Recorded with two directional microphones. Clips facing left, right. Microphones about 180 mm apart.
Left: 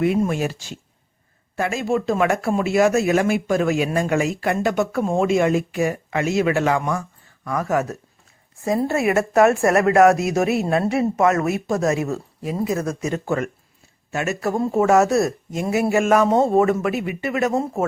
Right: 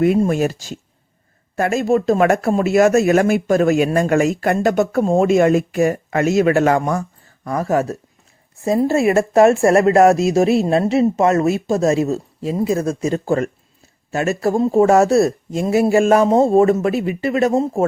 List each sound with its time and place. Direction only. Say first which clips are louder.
0.2 s a man's voice: right 5 dB; 45° right (ahead or behind); by 17.8 s 30° right (ahead or behind)